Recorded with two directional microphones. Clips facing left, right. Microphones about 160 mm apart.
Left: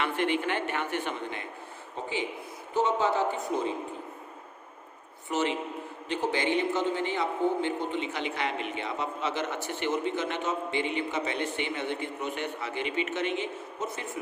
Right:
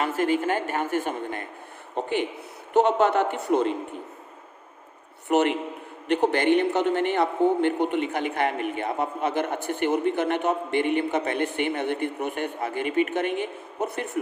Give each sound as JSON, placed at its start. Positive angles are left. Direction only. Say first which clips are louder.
{"t": 0.2, "sound": "speech", "louder": "right 6 dB", "side_deg": -40}
{"t": 2.0, "sound": "a man's voice", "louder": "right 7 dB", "side_deg": -60}
{"t": 5.3, "sound": "a man's voice", "louder": "right 7 dB", "side_deg": -60}